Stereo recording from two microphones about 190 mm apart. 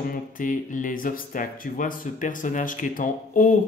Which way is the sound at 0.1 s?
45° left (ahead or behind).